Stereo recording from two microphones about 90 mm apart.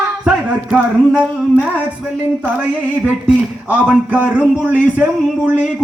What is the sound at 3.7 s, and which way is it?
A man's voice, 15° right (ahead or behind).